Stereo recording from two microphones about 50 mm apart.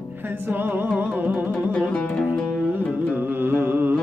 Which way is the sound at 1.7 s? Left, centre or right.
Left.